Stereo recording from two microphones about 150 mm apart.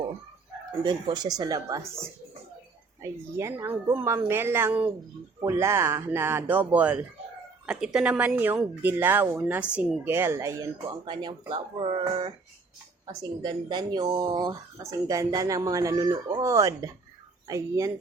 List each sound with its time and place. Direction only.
0.8 s speech: 30° right (ahead or behind)
3.0 s a woman's voice: 20° right (ahead or behind)
10.8 s speech: 30° right (ahead or behind)